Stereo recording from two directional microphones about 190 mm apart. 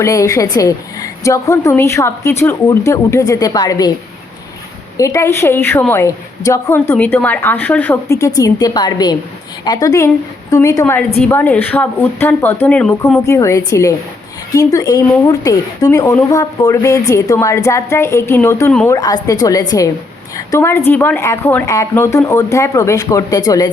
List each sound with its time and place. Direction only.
0.0 s a woman's voice: 15° left (ahead or behind)
4.9 s a woman's voice: 15° left (ahead or behind)